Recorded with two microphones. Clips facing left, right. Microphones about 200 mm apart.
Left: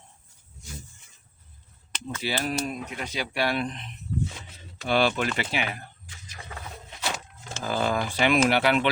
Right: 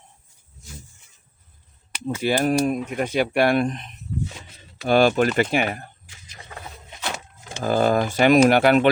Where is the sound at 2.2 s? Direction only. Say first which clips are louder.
Right 9 dB; 50° right (ahead or behind).